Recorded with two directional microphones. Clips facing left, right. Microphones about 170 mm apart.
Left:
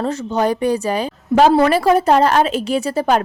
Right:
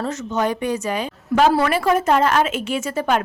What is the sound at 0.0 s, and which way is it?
A woman's voice, 35° left (ahead or behind).